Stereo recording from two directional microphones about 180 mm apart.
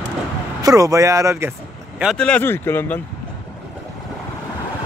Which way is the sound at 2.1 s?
5° left (ahead or behind).